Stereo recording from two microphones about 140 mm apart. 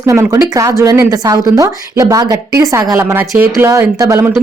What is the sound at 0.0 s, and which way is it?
A woman's voice, 20° right (ahead or behind).